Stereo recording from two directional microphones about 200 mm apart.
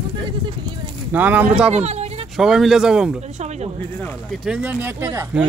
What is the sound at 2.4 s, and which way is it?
Speech, centre (ahead or behind).